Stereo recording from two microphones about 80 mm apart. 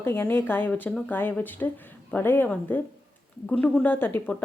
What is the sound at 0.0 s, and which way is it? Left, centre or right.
A woman's voice, left.